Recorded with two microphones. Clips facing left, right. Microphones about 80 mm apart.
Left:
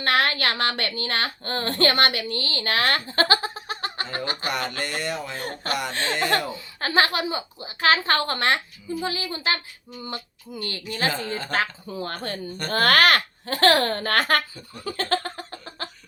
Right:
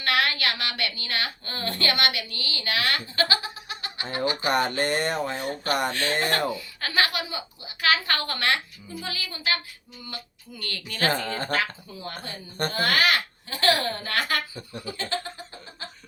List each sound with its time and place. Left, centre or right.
0.0 s a woman's voice: left
4.4 s speech: right
5.4 s speech: left
5.9 s a woman's voice: left
11.1 s speech: right
11.5 s a woman's voice: left
12.0 s speech: left
14.8 s a sound: left